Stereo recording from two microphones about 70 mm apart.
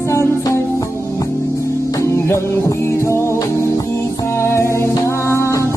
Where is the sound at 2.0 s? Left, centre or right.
Left.